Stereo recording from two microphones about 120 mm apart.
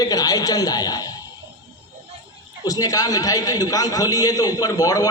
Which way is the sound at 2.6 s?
30° left (ahead or behind).